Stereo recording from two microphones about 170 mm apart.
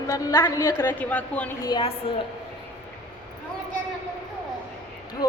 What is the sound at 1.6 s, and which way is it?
Speech, 25° left (ahead or behind).